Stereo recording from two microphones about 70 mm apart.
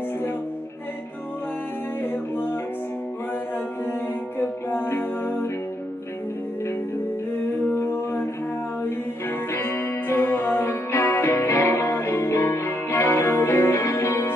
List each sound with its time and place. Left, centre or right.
2.3 s music: left
4.4 s music: left
7.3 s a sound: left
9.5 s music: left